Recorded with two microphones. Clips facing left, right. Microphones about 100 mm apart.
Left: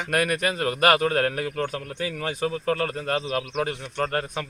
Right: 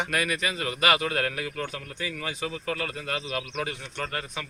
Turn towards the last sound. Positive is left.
turn(degrees=45)  # may be behind; listen again after turning